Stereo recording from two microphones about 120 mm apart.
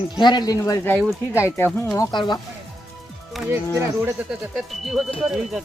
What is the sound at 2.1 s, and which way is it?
Speech, 40° left (ahead or behind).